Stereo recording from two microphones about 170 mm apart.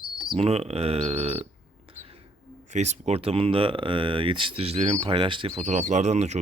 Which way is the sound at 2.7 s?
40° right (ahead or behind).